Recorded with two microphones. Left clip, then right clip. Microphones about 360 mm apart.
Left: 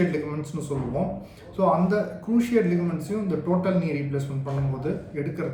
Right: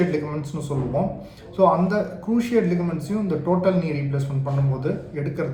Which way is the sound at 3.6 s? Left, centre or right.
Centre.